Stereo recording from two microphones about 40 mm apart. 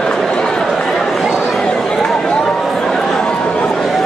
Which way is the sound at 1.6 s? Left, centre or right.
Centre.